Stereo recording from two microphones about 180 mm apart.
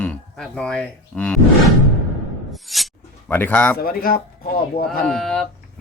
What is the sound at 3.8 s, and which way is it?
Speech, 55° left (ahead or behind).